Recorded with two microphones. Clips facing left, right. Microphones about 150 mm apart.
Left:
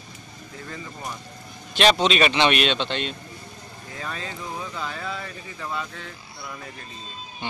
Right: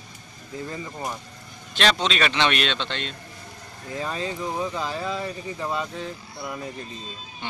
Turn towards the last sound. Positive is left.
turn(degrees=-20)  # may be behind; listen again after turning